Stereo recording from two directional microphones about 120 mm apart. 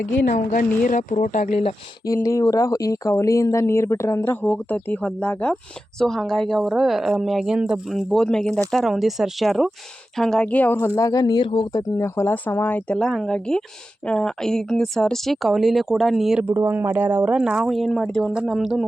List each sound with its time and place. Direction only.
0.3 s a woman's voice: 90° left
2.0 s speech: 25° left (ahead or behind); by 11.7 s 45° left (ahead or behind)
11.7 s speech: 25° left (ahead or behind); by 16.4 s centre (ahead or behind)
16.4 s speech: 15° right (ahead or behind); by 18.3 s 10° left (ahead or behind)
18.3 s speech: centre (ahead or behind)